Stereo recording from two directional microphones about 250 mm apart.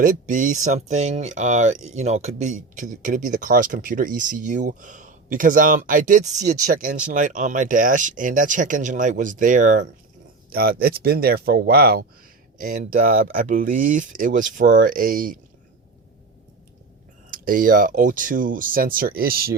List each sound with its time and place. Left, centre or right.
0.0 s speech: right
17.3 s speech: right